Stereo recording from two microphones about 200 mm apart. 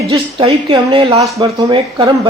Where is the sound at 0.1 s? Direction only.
25° right (ahead or behind).